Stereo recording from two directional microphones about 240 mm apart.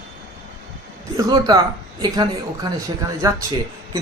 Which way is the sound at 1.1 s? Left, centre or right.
Centre.